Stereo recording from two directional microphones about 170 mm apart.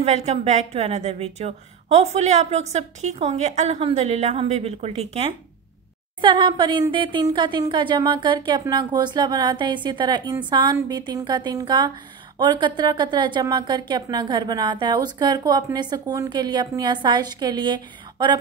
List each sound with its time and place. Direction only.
0.0 s a woman's voice: 40° right (ahead or behind)